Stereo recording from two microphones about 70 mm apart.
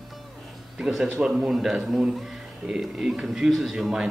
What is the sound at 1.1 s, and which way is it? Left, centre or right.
A man's voice, centre.